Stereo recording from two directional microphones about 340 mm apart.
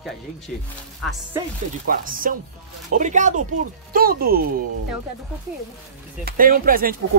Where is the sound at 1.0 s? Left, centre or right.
Centre.